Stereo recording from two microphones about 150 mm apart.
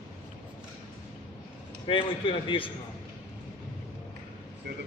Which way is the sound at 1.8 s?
35° left (ahead or behind).